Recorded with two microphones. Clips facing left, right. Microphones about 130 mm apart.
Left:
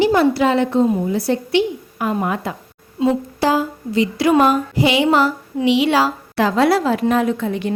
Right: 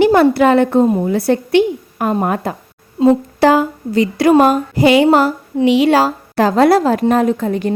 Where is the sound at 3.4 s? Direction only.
60° right (ahead or behind).